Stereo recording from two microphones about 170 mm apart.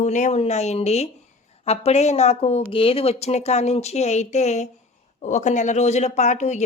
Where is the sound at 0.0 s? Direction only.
45° left (ahead or behind).